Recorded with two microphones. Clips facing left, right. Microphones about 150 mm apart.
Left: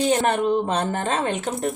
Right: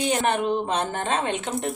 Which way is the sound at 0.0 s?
35° left (ahead or behind).